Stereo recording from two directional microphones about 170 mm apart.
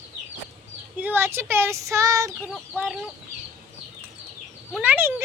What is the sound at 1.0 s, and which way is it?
Speech, 10° right (ahead or behind).